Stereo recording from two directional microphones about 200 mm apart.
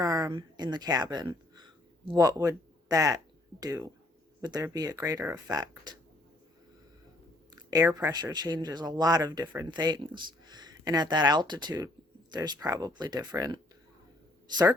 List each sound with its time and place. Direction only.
0.0 s speech: 20° right (ahead or behind)
7.5 s speech: 20° right (ahead or behind)